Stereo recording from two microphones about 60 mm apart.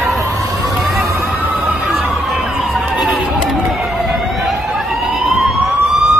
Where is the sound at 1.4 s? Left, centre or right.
Right.